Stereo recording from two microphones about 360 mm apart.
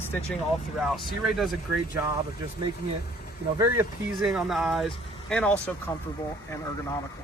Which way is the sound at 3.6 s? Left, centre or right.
Centre.